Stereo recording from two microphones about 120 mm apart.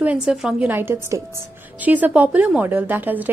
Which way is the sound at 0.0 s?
10° right (ahead or behind).